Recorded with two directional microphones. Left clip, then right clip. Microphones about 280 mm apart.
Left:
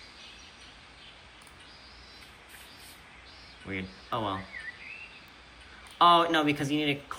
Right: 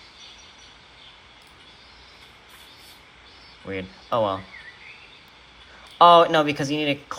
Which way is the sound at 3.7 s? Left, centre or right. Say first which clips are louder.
Right 8 dB; centre.